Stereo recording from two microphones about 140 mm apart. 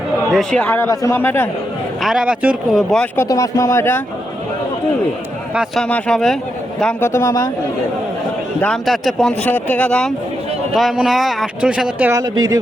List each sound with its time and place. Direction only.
0.3 s speech: centre (ahead or behind)
0.6 s speech: 15° left (ahead or behind)
2.0 s a man's voice: 5° right (ahead or behind)
2.7 s speech: 5° left (ahead or behind)
3.2 s speech: 20° left (ahead or behind)
5.5 s speech: 5° left (ahead or behind)
7.0 s speech: 20° left (ahead or behind)
8.6 s speech: centre (ahead or behind)
9.4 s speech: 10° left (ahead or behind); by 12.1 s 10° right (ahead or behind)
12.1 s speech: 25° right (ahead or behind)